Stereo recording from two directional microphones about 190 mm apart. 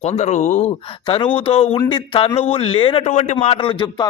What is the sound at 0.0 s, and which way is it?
A man's voice, 35° left (ahead or behind).